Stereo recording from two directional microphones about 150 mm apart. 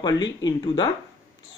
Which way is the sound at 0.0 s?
30° left (ahead or behind).